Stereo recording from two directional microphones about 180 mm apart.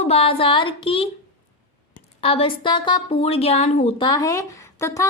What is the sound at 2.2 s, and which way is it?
A woman's voice, 30° left (ahead or behind).